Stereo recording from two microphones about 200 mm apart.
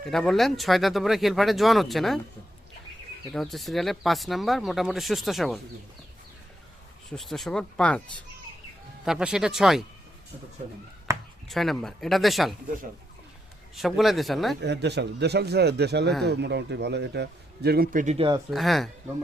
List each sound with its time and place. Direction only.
0.0 s speech: centre (ahead or behind)
3.3 s speech: centre (ahead or behind)
7.1 s speech: centre (ahead or behind)
9.0 s speech: 5° right (ahead or behind)
10.6 s speech: 35° right (ahead or behind)
11.4 s speech: centre (ahead or behind)
13.7 s speech: centre (ahead or behind)
14.6 s a man's voice: 60° right (ahead or behind); by 18.3 s 35° right (ahead or behind)
18.5 s speech: centre (ahead or behind)